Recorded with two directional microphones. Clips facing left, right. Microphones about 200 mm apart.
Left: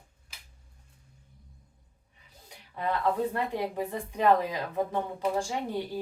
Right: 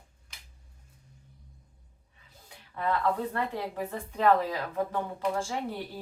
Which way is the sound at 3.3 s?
15° left (ahead or behind).